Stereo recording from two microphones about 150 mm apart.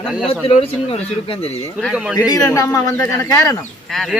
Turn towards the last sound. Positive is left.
turn(degrees=0)  # may be behind; listen again after turning